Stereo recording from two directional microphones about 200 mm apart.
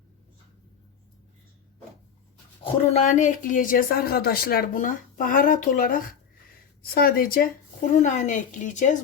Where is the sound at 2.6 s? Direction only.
35° left (ahead or behind).